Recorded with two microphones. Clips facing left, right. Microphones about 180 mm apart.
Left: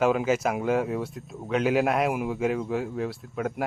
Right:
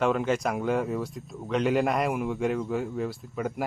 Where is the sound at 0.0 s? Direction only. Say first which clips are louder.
Left 2 dB; 5° left (ahead or behind).